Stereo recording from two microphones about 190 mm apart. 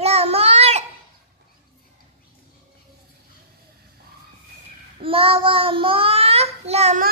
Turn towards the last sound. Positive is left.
turn(degrees=-35)  # may be behind; listen again after turning